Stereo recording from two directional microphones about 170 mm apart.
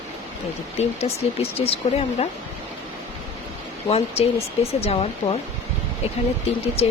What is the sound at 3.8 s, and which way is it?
Speech, 35° left (ahead or behind).